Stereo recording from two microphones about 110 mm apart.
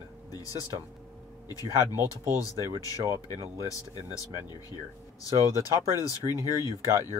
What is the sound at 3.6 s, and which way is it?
Speech, 30° left (ahead or behind).